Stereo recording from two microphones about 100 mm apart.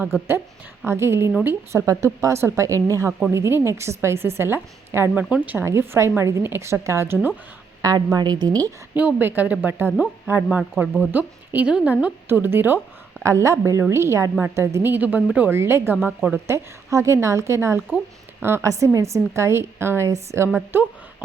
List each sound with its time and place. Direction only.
0.0 s speech: 25° right (ahead or behind)
1.9 s speech: 30° right (ahead or behind)
3.1 s speech: 10° right (ahead or behind)
3.3 s speech: 25° right (ahead or behind)
9.0 s speech: 15° right (ahead or behind)
16.0 s speech: 15° right (ahead or behind)
16.5 s speech: 30° right (ahead or behind)
17.8 s speech: 5° left (ahead or behind)
18.4 s speech: 25° right (ahead or behind)
21.2 s a sound: 15° right (ahead or behind)